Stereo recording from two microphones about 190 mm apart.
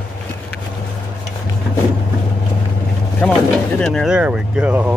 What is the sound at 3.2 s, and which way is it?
Speech, 5° left (ahead or behind).